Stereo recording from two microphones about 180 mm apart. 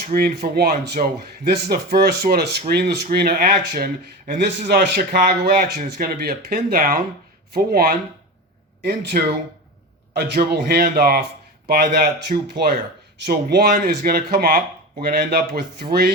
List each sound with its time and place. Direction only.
0.0 s speech: 55° right (ahead or behind)
4.6 s a man's voice: 70° right (ahead or behind)